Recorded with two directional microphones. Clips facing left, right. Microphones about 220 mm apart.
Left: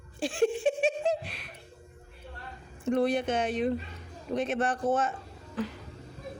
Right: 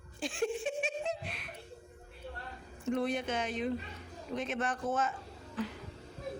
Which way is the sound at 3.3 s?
50° left (ahead or behind).